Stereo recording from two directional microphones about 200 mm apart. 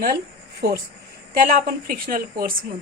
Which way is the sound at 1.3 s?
45° right (ahead or behind).